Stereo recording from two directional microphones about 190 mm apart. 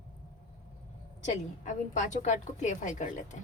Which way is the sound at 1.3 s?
40° left (ahead or behind).